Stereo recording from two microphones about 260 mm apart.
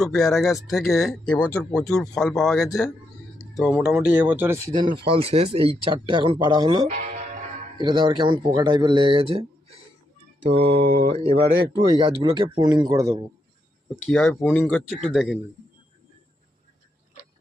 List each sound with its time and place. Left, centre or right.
0.0 s speech: centre
5.0 s speech: right
6.9 s speech: right
7.8 s speech: centre
9.3 s a sound: right
10.4 s speech: right
14.0 s speech: centre